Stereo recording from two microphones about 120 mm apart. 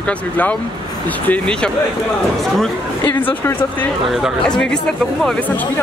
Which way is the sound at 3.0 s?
15° left (ahead or behind).